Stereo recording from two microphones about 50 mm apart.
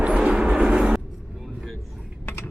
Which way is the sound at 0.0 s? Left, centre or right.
Right.